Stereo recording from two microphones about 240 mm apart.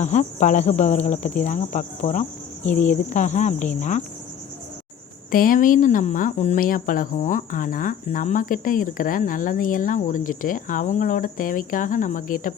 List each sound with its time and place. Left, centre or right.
0.0 s speech: left
5.3 s speech: left